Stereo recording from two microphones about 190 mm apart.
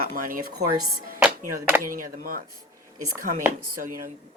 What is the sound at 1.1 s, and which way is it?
Speech, 10° right (ahead or behind).